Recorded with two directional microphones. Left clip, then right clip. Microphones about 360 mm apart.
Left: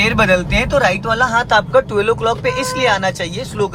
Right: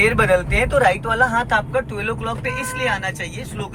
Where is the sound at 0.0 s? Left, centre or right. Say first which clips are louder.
Left 2 dB; centre.